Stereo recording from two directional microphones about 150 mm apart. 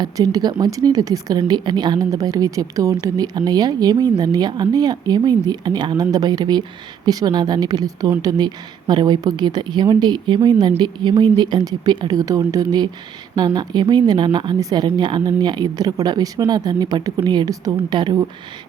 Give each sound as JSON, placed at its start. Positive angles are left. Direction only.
{"t": 0.0, "sound": "speech", "side_deg": -25}